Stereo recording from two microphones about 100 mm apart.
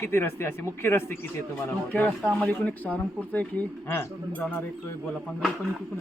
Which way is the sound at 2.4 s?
15° left (ahead or behind).